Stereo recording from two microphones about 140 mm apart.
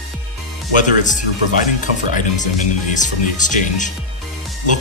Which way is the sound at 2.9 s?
65° left (ahead or behind).